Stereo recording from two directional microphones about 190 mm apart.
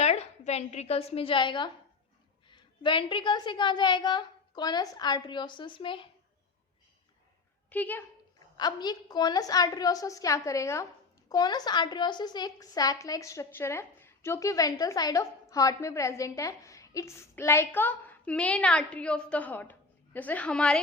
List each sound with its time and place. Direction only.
0.0 s a woman's voice: 35° left (ahead or behind)
7.7 s a woman's voice: 10° left (ahead or behind)
8.5 s a woman's voice: 20° left (ahead or behind); by 20.8 s 5° left (ahead or behind)